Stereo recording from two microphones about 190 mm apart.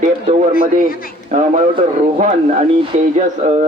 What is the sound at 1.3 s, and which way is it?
A man's voice, 40° right (ahead or behind).